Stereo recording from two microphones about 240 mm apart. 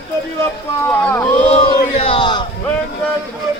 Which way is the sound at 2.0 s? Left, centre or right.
Left.